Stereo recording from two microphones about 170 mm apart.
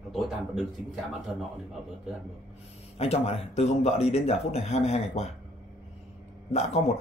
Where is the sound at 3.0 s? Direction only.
35° left (ahead or behind).